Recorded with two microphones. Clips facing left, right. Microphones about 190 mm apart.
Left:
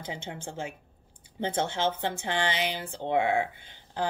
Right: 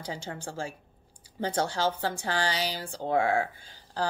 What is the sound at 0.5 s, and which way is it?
Speech, 20° left (ahead or behind).